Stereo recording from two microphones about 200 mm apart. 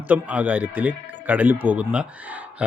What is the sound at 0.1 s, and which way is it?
Speech, 5° right (ahead or behind).